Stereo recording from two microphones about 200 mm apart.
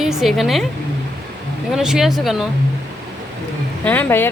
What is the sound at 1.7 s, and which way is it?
Speech, centre (ahead or behind).